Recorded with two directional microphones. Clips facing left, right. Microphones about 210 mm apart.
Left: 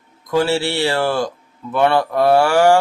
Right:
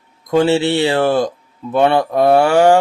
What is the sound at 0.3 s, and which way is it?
Speech, 20° right (ahead or behind).